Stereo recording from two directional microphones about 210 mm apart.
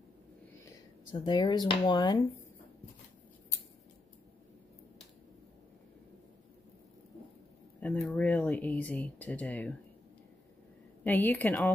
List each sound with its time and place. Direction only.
1.1 s speech: 20° left (ahead or behind)
7.8 s speech: 5° left (ahead or behind)
11.1 s speech: 10° left (ahead or behind)